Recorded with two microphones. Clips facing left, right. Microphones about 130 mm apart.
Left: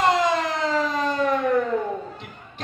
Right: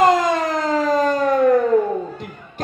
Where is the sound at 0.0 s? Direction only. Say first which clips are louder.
Right 5 dB; 45° right (ahead or behind).